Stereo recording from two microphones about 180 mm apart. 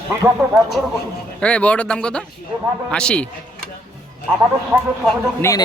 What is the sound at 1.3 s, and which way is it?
Speech, 5° left (ahead or behind).